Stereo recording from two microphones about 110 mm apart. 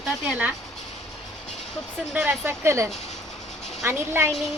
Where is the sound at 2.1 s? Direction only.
20° right (ahead or behind).